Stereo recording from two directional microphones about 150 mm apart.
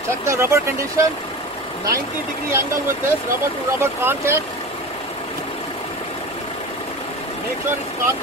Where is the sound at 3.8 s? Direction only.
15° right (ahead or behind).